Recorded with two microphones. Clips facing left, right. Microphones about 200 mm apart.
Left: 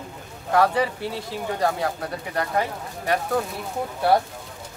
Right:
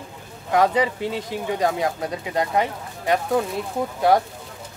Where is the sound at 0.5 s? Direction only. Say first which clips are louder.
Right 1 dB; 20° right (ahead or behind).